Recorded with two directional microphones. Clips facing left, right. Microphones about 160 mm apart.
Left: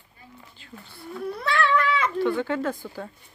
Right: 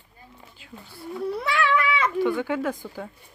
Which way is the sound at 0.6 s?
10° right (ahead or behind).